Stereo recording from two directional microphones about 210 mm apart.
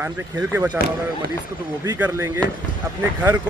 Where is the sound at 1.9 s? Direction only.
10° right (ahead or behind).